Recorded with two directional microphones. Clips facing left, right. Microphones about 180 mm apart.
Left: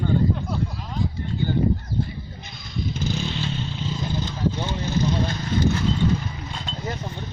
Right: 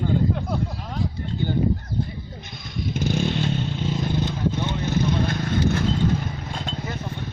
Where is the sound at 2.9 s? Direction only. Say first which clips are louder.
Right 5 dB; 50° right (ahead or behind).